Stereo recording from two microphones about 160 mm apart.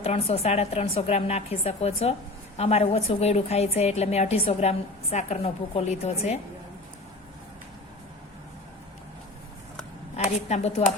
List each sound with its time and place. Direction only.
0.0 s a woman's voice: 40° left (ahead or behind)
10.5 s a woman's voice: 40° left (ahead or behind)